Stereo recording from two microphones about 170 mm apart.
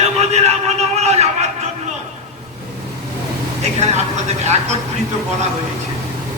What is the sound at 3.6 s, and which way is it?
Speech, 40° right (ahead or behind).